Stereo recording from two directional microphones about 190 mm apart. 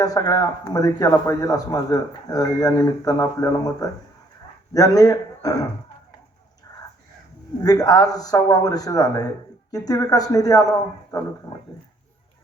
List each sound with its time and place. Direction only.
0.0 s speech: 20° left (ahead or behind)
6.7 s livestock: 15° left (ahead or behind)
7.6 s speech: 20° left (ahead or behind)